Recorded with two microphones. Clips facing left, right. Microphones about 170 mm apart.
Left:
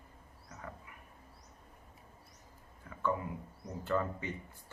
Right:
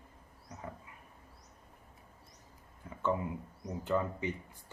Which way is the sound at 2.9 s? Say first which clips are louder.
Right 3 dB; 25° right (ahead or behind).